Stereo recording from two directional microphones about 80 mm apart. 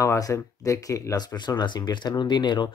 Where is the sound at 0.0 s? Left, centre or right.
Left.